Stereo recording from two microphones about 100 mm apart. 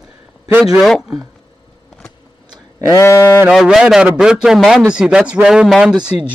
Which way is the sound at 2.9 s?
25° left (ahead or behind).